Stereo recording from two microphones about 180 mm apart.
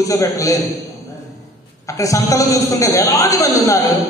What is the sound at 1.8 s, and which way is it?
A man's voice, 20° left (ahead or behind).